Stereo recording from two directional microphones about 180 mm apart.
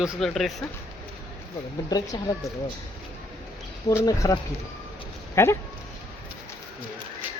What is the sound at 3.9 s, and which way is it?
Speech, 15° left (ahead or behind).